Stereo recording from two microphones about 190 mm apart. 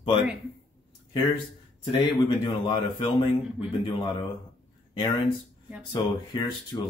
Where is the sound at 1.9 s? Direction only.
25° left (ahead or behind).